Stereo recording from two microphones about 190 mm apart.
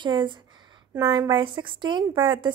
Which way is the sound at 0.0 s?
25° right (ahead or behind).